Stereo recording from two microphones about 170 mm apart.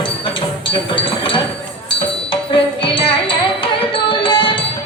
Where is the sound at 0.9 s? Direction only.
30° left (ahead or behind).